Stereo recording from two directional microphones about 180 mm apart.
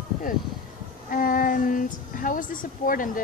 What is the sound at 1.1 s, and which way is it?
Speech, 50° left (ahead or behind).